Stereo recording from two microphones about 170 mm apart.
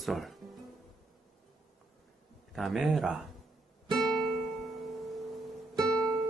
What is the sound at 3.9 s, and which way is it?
Music, centre (ahead or behind).